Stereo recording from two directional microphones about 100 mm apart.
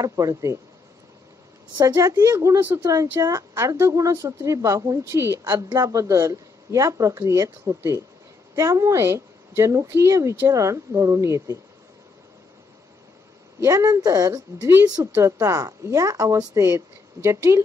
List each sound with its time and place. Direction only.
0.0 s speech: 35° right (ahead or behind)
1.8 s speech: 35° right (ahead or behind)
3.5 s speech: 25° right (ahead or behind)
5.6 s speech: 45° right (ahead or behind)
5.9 s speech: 30° right (ahead or behind)
13.6 s speech: 35° right (ahead or behind)
14.7 s speech: 25° right (ahead or behind)